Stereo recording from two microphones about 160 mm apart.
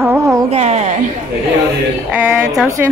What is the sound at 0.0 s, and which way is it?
Carnatic music, 10° right (ahead or behind).